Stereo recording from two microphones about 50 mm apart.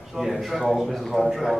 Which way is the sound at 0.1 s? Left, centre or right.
Centre.